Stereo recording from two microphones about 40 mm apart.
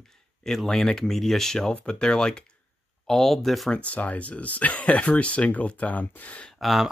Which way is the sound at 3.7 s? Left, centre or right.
Left.